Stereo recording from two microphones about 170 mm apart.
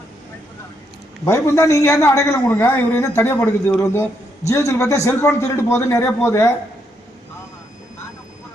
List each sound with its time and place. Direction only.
1.2 s a man's voice: 15° left (ahead or behind)